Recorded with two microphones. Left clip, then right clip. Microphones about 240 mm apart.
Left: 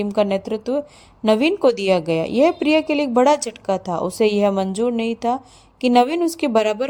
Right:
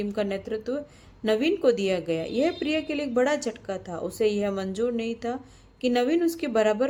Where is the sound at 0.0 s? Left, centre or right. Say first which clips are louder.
Left 9 dB; left.